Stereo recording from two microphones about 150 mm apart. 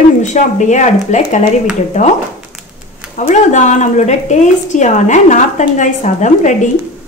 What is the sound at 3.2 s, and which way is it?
A woman's voice, 55° left (ahead or behind).